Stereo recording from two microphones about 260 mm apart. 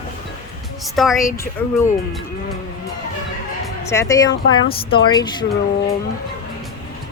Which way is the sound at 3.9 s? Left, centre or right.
Centre.